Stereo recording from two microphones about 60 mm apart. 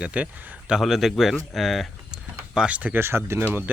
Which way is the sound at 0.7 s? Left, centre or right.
Centre.